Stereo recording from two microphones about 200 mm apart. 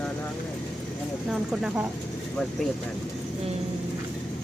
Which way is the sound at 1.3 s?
5° right (ahead or behind).